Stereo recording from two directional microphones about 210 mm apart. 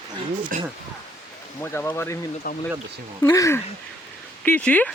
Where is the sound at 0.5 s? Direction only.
35° right (ahead or behind).